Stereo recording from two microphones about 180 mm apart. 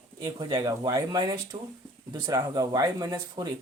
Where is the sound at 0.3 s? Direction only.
25° right (ahead or behind).